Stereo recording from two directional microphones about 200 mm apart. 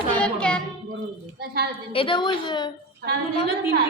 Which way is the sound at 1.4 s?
50° right (ahead or behind).